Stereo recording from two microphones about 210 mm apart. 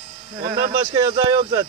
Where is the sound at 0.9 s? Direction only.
20° right (ahead or behind).